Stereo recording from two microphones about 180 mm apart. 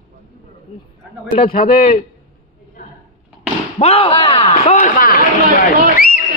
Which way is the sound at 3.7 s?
35° left (ahead or behind).